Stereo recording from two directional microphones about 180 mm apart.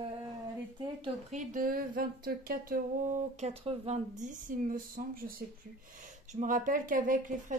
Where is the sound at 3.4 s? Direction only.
35° right (ahead or behind).